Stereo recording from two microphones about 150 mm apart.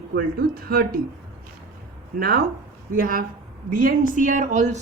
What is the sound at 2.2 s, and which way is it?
Speech, 90° right.